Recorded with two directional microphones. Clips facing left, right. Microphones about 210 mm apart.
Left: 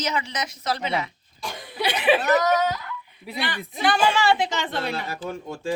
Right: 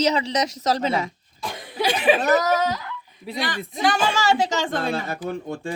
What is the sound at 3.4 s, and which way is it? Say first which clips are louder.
A woman's voice: right 2 dB; 45° right (ahead or behind).